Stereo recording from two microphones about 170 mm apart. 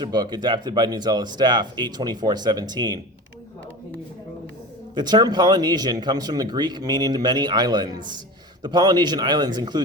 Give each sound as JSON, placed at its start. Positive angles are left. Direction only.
{"t": 0.0, "sound": "speech", "side_deg": -25}
{"t": 4.9, "sound": "speech", "side_deg": -25}